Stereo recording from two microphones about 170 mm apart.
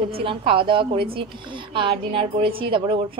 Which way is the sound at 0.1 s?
35° right (ahead or behind).